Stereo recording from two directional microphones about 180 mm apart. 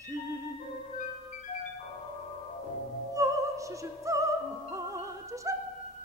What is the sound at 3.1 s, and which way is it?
Opera, 15° right (ahead or behind).